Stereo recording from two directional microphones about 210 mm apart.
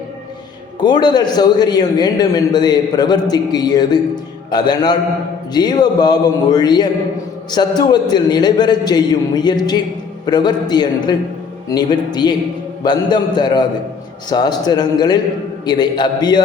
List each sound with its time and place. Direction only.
0.8 s a man's voice: 20° left (ahead or behind)